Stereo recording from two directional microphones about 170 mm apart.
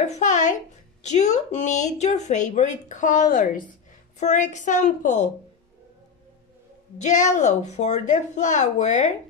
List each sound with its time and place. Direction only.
0.0 s speech: 45° left (ahead or behind)
7.0 s speech: 45° left (ahead or behind)